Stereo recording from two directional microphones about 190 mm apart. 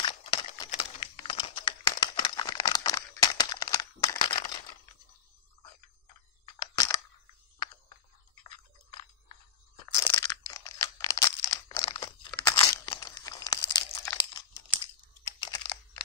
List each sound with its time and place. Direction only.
0.1 s crumpling: 30° left (ahead or behind)
6.6 s single-lens reflex camera: 20° left (ahead or behind)
9.9 s crunch: 15° left (ahead or behind)
15.4 s computer keyboard: 25° left (ahead or behind)